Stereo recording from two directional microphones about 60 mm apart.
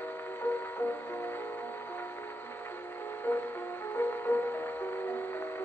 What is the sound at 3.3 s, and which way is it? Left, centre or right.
Music, left.